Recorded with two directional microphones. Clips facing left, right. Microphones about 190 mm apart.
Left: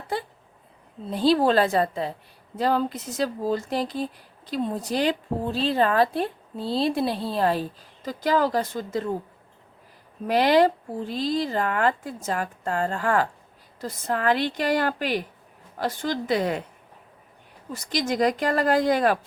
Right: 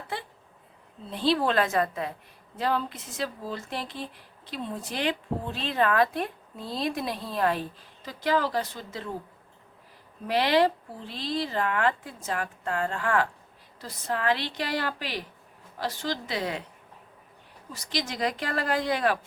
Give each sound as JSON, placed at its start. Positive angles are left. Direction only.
{"t": 1.1, "sound": "speech", "side_deg": 40}
{"t": 10.2, "sound": "speech", "side_deg": 45}
{"t": 17.7, "sound": "speech", "side_deg": 50}